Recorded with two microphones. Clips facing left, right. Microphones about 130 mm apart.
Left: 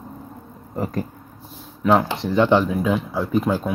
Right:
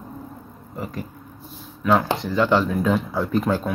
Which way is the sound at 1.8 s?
25° left (ahead or behind).